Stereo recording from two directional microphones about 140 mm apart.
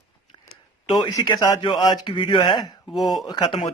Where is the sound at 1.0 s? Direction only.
25° left (ahead or behind).